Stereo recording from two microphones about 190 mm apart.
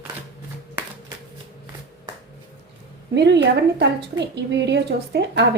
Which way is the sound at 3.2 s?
65° right (ahead or behind).